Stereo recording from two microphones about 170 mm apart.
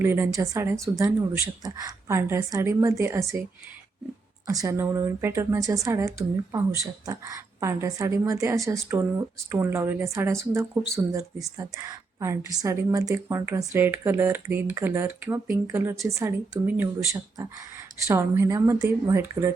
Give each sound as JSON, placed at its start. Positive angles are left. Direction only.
{"t": 0.0, "sound": "a woman's voice", "side_deg": -15}
{"t": 4.4, "sound": "a woman's voice", "side_deg": -20}